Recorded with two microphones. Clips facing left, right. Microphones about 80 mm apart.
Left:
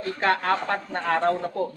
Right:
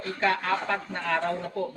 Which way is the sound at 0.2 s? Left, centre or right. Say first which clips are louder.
Left 3 dB; left.